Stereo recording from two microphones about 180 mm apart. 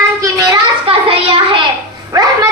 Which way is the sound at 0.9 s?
30° right (ahead or behind).